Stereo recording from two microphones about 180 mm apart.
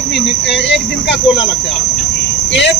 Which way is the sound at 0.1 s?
80° left.